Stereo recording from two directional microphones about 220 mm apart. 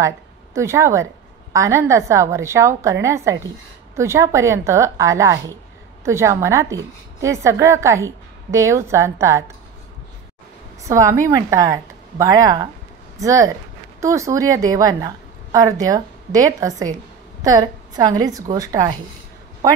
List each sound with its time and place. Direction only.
0.6 s a woman's voice: 15° right (ahead or behind)
10.8 s a woman's voice: 15° right (ahead or behind)